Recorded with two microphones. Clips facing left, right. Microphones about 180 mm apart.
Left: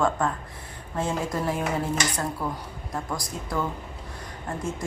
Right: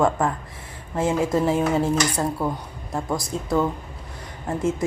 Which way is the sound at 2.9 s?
25° right (ahead or behind).